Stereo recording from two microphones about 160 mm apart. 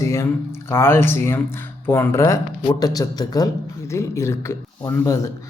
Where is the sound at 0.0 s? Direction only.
20° left (ahead or behind).